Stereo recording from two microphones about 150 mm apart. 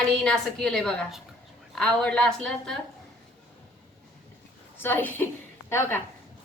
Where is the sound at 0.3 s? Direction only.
5° left (ahead or behind).